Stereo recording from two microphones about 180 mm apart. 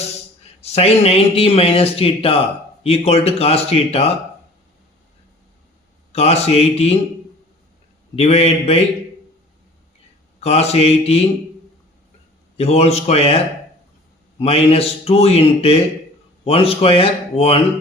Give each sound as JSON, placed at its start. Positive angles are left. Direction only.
{"t": 0.4, "sound": "a man's voice", "side_deg": 35}
{"t": 6.1, "sound": "a man's voice", "side_deg": 35}
{"t": 8.1, "sound": "a man's voice", "side_deg": 35}
{"t": 10.4, "sound": "a man's voice", "side_deg": 35}
{"t": 12.5, "sound": "a man's voice", "side_deg": 35}